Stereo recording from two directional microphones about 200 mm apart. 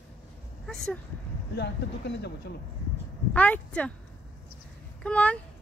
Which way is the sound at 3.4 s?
5° left (ahead or behind).